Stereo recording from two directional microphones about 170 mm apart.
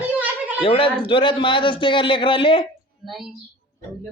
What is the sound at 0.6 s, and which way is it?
A man's voice, 30° left (ahead or behind).